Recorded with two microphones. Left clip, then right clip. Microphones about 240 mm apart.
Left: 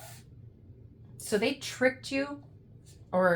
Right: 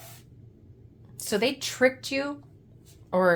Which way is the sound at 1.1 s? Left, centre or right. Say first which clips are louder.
Right 3 dB; right.